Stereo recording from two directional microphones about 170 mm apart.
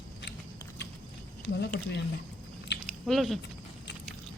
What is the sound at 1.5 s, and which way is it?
Speech, 75° left (ahead or behind).